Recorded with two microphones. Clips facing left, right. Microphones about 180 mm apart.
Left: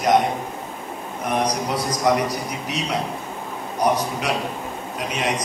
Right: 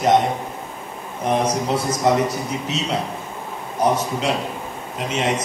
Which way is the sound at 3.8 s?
25° right (ahead or behind).